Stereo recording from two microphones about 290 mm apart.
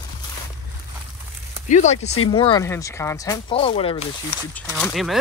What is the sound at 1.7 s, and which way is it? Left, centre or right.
Speech, left.